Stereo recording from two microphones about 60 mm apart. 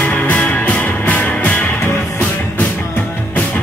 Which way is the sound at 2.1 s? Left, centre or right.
Left.